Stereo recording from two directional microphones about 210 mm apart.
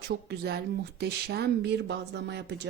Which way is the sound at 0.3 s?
50° right (ahead or behind).